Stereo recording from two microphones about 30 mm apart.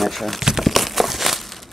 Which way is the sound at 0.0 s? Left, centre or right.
Centre.